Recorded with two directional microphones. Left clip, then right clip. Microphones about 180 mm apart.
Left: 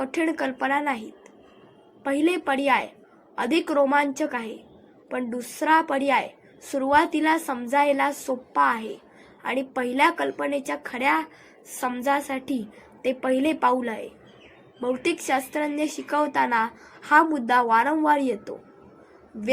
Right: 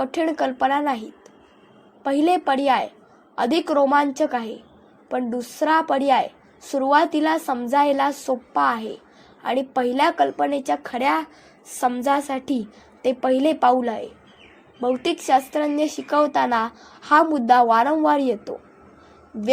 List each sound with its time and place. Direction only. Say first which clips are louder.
0.0 s a woman's voice: right 4 dB; 35° right (ahead or behind)
2.0 s a woman's voice: right 4 dB; 40° right (ahead or behind)
10.7 s a woman's voice: right 3 dB; 55° right (ahead or behind); by 18.5 s 35° right (ahead or behind)